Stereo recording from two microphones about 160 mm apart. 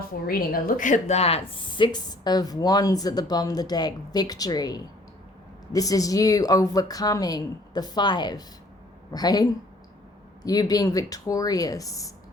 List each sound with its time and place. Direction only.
0.1 s a woman's voice: 70° left (ahead or behind); by 12.1 s 20° left (ahead or behind)